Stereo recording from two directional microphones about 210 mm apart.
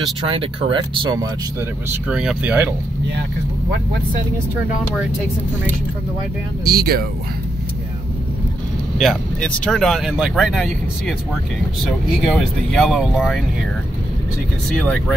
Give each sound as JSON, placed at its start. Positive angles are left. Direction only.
{"t": 0.3, "sound": "speech", "side_deg": -25}
{"t": 1.9, "sound": "speech", "side_deg": -5}
{"t": 6.6, "sound": "speech", "side_deg": -45}
{"t": 8.9, "sound": "speech", "side_deg": 0}
{"t": 12.3, "sound": "speech", "side_deg": 0}